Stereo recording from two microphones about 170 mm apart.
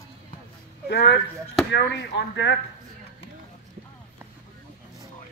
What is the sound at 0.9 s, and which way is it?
Speech, 80° left.